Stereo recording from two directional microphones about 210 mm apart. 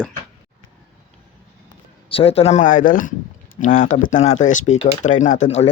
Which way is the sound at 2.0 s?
25° left (ahead or behind).